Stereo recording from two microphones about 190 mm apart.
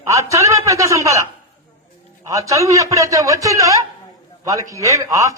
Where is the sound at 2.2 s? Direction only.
15° right (ahead or behind).